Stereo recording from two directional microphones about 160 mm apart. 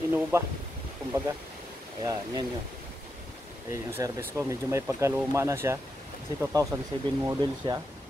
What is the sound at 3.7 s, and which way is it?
Speech, 15° right (ahead or behind).